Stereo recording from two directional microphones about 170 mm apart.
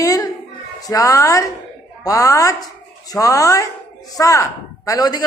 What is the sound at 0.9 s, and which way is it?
A man's voice, 20° left (ahead or behind).